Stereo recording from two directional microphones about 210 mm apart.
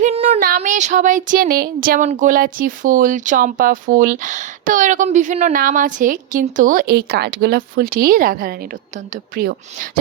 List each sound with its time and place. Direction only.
0.0 s child singing: 30° right (ahead or behind)
9.3 s speech: 45° right (ahead or behind)